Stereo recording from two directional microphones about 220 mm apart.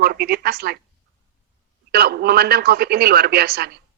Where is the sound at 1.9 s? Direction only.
45° right (ahead or behind).